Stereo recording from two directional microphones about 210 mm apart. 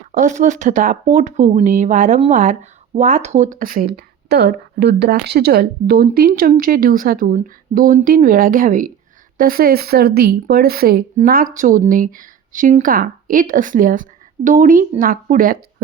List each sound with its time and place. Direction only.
0.1 s speech: 35° right (ahead or behind)